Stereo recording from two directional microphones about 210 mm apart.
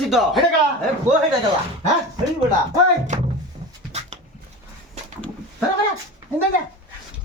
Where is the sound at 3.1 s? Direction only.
35° right (ahead or behind).